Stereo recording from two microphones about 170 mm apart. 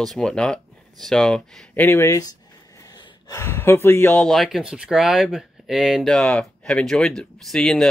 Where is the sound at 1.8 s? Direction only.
15° left (ahead or behind).